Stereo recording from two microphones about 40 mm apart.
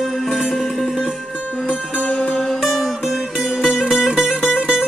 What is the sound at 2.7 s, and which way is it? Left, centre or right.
Music, centre.